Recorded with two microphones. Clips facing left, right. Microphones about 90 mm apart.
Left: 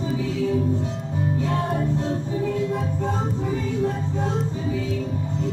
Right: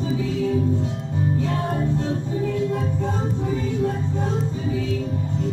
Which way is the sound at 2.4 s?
45° left (ahead or behind).